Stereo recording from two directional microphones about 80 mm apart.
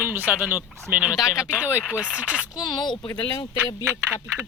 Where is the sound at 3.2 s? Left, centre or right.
Left.